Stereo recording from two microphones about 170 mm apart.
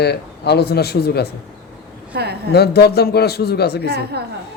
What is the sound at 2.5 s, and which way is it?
Speech, 70° left (ahead or behind).